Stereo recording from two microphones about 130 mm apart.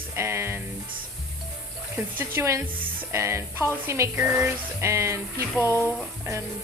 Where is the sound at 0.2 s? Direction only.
20° right (ahead or behind).